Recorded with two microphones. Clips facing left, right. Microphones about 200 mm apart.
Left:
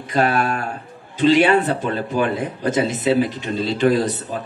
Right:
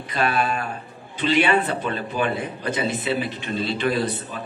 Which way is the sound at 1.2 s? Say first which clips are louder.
Left 6 dB; 45° left (ahead or behind).